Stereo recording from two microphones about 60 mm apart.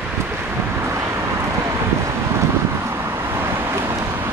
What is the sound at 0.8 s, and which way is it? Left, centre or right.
Vehicle, right.